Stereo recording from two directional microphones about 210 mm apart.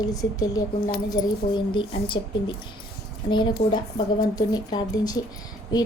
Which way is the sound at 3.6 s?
30° left (ahead or behind).